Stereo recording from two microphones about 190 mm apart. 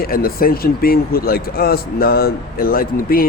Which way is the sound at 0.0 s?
50° left (ahead or behind).